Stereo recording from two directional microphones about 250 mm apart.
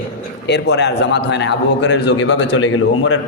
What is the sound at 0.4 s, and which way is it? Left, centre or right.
A man's voice, left.